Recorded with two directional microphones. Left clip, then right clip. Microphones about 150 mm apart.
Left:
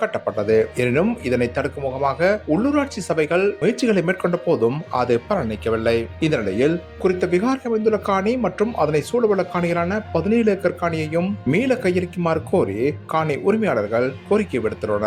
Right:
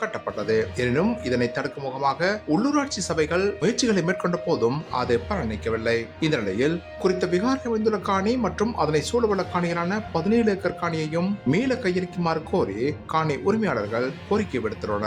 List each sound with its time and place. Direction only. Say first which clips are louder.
0.0 s a man's voice: left 6 dB; 20° left (ahead or behind)